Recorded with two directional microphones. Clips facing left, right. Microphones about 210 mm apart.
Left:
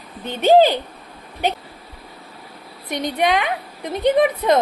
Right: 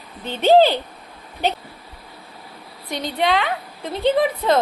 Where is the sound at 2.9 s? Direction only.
20° left (ahead or behind).